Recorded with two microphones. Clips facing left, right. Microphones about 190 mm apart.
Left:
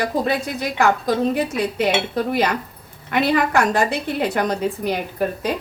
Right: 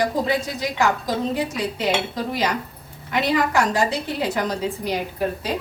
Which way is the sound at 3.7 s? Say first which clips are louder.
Left 2 dB; 55° left (ahead or behind).